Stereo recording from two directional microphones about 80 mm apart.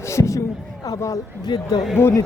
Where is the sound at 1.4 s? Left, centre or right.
Left.